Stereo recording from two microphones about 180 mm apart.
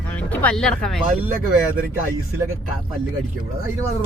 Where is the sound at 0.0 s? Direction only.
5° left (ahead or behind).